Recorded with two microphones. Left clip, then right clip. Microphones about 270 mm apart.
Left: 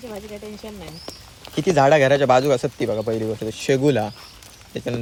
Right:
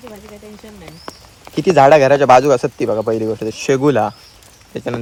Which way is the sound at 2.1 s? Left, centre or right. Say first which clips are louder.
Right 7 dB; right.